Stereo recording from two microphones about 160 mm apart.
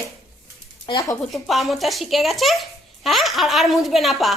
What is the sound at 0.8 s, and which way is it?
Speech, 20° left (ahead or behind).